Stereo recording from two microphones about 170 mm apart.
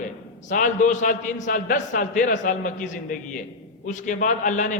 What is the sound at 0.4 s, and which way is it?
A man's voice, 50° left (ahead or behind).